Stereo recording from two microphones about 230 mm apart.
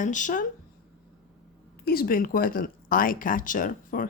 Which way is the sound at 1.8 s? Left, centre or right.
Left.